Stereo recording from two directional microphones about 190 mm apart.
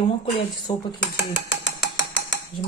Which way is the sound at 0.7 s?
30° left (ahead or behind).